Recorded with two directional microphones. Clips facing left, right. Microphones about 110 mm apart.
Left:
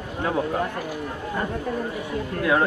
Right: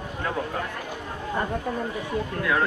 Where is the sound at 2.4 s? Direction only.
25° left (ahead or behind).